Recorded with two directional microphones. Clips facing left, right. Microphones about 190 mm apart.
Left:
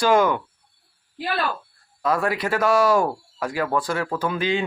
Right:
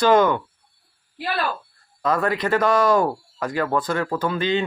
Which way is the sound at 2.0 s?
10° left (ahead or behind).